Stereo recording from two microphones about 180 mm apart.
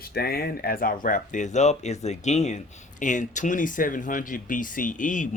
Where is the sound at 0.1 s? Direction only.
60° left (ahead or behind).